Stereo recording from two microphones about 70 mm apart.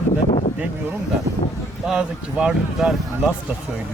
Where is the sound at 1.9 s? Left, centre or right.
Centre.